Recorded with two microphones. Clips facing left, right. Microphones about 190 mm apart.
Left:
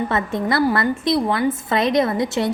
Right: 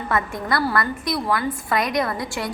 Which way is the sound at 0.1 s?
25° left (ahead or behind).